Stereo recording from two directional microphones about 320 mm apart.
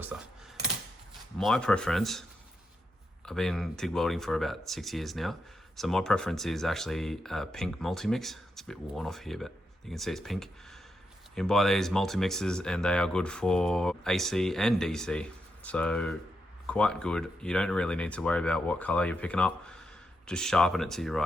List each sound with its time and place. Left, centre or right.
1.4 s speech: centre
3.2 s speech: centre